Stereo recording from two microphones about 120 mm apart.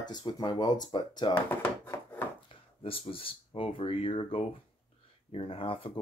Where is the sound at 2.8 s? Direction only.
50° left (ahead or behind).